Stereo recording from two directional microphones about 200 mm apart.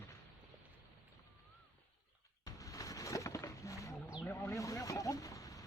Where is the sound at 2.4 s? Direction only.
15° left (ahead or behind).